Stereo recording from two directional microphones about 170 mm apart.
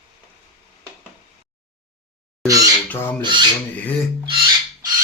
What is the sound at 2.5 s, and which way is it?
Speech, 20° right (ahead or behind).